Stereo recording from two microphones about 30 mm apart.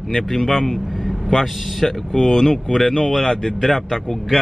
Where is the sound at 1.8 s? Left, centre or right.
Centre.